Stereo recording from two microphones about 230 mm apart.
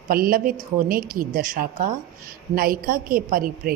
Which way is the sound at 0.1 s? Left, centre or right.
Right.